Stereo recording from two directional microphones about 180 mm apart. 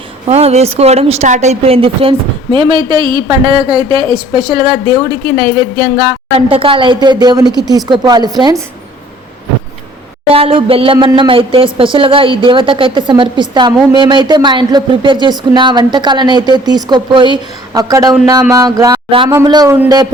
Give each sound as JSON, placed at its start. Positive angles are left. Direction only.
{"t": 0.3, "sound": "a woman's voice", "side_deg": -35}
{"t": 10.3, "sound": "a sound", "side_deg": -30}
{"t": 10.9, "sound": "a woman's voice", "side_deg": -25}